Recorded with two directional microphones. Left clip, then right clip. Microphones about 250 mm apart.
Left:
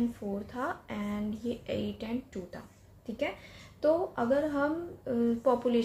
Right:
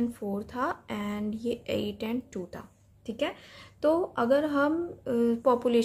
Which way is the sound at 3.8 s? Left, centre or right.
Right.